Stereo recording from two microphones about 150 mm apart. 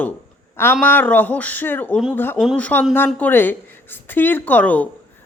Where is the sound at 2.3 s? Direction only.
5° right (ahead or behind).